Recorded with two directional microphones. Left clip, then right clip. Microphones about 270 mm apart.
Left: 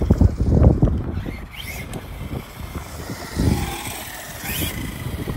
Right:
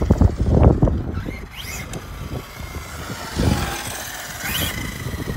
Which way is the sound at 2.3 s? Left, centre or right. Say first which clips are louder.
Right 2 dB; centre.